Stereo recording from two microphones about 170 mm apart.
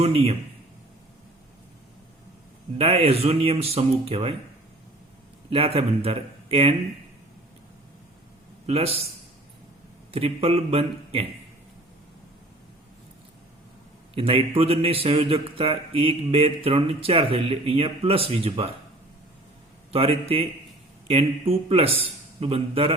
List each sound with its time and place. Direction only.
0.0 s speech: 35° right (ahead or behind)
2.7 s speech: 35° right (ahead or behind)
5.5 s speech: 35° right (ahead or behind)
8.6 s speech: 35° right (ahead or behind)
10.1 s speech: 35° right (ahead or behind)
14.2 s speech: 35° right (ahead or behind)
19.9 s speech: 35° right (ahead or behind)